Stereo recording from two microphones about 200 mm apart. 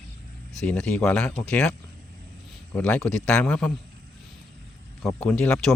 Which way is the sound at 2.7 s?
5° left (ahead or behind).